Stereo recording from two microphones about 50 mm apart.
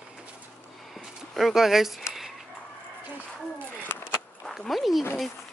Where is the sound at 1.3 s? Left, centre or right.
Centre.